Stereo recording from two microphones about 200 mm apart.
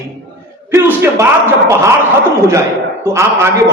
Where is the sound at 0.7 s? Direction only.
10° right (ahead or behind).